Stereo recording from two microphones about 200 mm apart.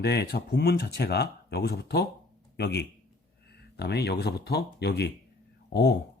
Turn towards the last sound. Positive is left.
turn(degrees=60)  # may be behind; listen again after turning